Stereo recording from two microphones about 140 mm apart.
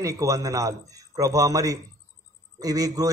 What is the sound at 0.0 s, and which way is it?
A man's voice, 25° right (ahead or behind).